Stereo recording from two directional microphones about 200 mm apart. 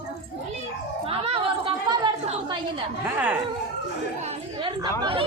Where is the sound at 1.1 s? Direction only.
30° right (ahead or behind).